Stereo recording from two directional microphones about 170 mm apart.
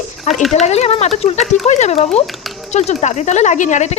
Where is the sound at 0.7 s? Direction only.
40° left (ahead or behind).